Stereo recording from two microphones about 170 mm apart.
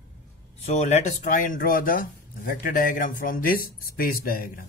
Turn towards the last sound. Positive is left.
turn(degrees=55)  # may be behind; listen again after turning